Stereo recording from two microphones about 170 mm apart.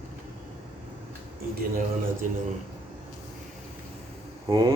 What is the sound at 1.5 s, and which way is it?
Speech, 55° right (ahead or behind).